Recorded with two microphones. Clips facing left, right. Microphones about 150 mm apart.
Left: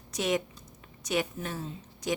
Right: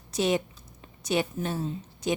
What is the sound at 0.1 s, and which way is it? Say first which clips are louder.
A woman's voice: right 3 dB; 30° right (ahead or behind).